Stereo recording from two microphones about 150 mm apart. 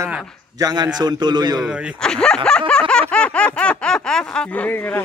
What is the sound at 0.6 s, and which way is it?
A man's voice, 25° right (ahead or behind).